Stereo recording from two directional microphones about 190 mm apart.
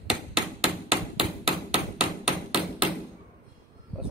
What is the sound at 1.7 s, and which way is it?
Hammer, 5° right (ahead or behind).